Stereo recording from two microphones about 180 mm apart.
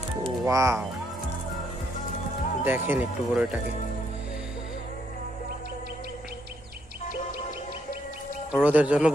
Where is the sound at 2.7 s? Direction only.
10° right (ahead or behind).